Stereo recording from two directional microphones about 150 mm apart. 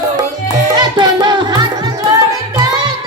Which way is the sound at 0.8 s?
30° right (ahead or behind).